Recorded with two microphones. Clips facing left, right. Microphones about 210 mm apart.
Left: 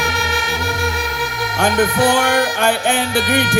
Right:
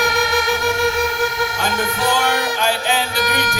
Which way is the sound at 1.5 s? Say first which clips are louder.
Left 6 dB; 50° left (ahead or behind).